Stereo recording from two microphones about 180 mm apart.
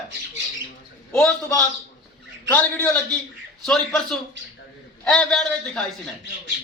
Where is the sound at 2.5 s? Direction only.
10° left (ahead or behind).